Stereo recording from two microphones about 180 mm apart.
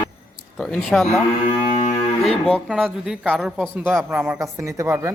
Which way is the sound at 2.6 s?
5° right (ahead or behind).